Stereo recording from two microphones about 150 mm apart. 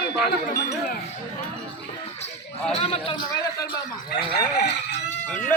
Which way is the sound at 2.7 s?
40° left (ahead or behind).